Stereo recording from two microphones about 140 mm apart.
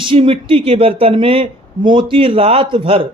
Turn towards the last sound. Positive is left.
turn(degrees=-40)  # may be behind; listen again after turning